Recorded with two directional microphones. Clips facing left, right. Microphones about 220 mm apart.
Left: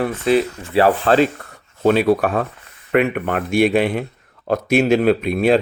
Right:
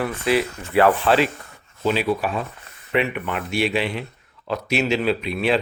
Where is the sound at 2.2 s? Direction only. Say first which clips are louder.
Left 6 dB; 55° left (ahead or behind).